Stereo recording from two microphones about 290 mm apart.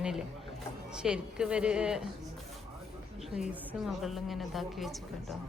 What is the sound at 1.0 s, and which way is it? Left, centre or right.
A woman's voice, centre.